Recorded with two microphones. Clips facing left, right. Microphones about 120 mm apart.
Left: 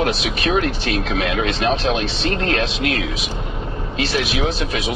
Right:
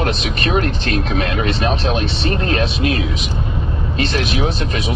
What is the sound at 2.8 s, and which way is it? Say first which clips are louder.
Speech: right 3 dB; 80° left.